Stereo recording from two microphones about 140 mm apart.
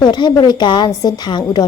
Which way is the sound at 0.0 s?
30° left (ahead or behind).